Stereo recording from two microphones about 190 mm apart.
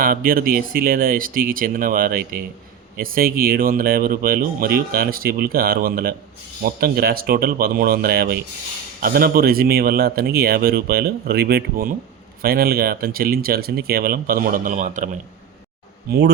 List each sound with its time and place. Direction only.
0.0 s speech: 50° right (ahead or behind)
16.0 s speech: 60° right (ahead or behind)